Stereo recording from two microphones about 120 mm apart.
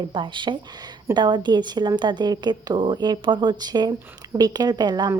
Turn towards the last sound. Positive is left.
turn(degrees=-35)  # may be behind; listen again after turning